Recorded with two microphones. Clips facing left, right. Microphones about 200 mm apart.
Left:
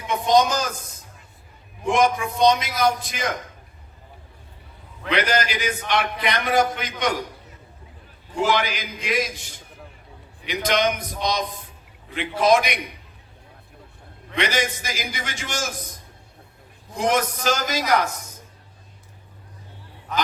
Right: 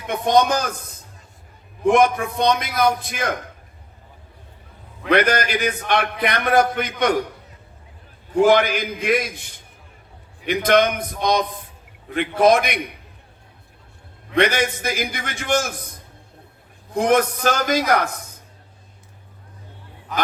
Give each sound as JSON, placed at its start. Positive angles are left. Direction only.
{"t": 0.1, "sound": "a man's voice", "side_deg": -60}
{"t": 1.9, "sound": "a man's voice", "side_deg": -60}
{"t": 5.0, "sound": "a man's voice", "side_deg": -55}
{"t": 8.4, "sound": "a man's voice", "side_deg": -55}
{"t": 14.3, "sound": "a man's voice", "side_deg": -55}
{"t": 16.9, "sound": "a man's voice", "side_deg": -55}